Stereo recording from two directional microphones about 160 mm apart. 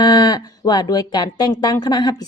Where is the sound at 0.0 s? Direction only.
25° left (ahead or behind).